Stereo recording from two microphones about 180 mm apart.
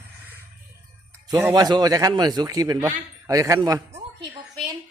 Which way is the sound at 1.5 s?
20° right (ahead or behind).